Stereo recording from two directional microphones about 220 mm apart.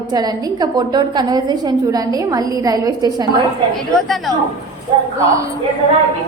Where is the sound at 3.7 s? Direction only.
Centre (ahead or behind).